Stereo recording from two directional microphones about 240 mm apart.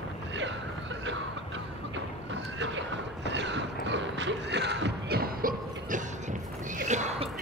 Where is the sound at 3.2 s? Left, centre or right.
Right.